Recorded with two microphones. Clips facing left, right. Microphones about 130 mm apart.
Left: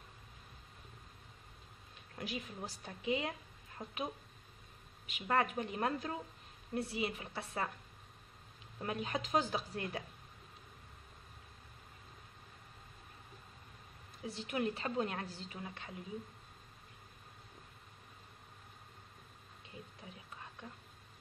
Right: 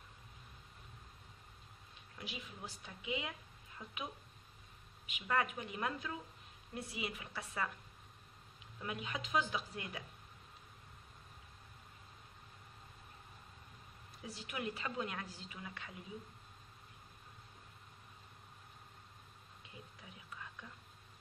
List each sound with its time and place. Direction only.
2.1 s a woman's voice: 45° left (ahead or behind)
5.1 s a woman's voice: 40° left (ahead or behind)
8.7 s a woman's voice: 40° left (ahead or behind)
14.2 s a woman's voice: 30° left (ahead or behind)
20.0 s whispering: 30° left (ahead or behind)